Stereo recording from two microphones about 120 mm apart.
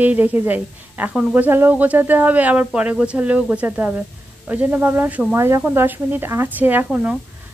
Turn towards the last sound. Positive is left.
turn(degrees=-10)  # may be behind; listen again after turning